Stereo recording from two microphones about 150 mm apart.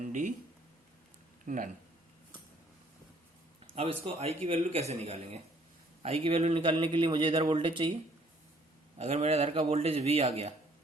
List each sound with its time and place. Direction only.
0.0 s a sound: 60° right (ahead or behind)
1.5 s speech: 60° right (ahead or behind)
3.7 s a man's voice: 40° right (ahead or behind)
9.0 s a man's voice: 45° right (ahead or behind)